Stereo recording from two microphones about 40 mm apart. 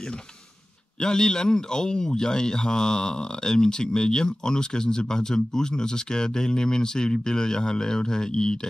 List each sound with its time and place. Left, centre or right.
1.0 s speech: centre